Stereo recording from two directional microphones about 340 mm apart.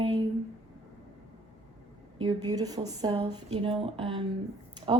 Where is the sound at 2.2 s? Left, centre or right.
Centre.